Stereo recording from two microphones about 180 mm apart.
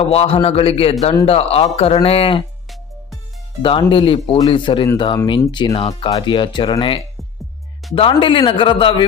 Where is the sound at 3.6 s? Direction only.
30° left (ahead or behind).